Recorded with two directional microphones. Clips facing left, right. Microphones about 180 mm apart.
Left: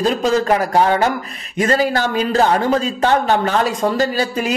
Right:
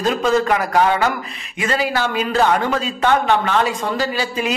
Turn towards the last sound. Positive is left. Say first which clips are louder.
# left 3 dB
turn(degrees=45)  # may be behind; listen again after turning